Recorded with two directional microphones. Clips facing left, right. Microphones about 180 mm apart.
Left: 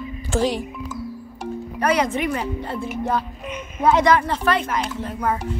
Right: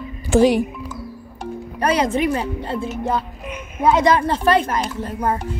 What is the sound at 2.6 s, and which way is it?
Music, 30° right (ahead or behind).